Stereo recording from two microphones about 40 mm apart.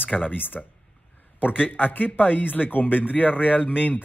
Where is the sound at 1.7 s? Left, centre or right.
Left.